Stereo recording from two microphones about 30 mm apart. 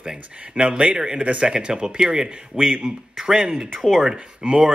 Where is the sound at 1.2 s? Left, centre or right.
Right.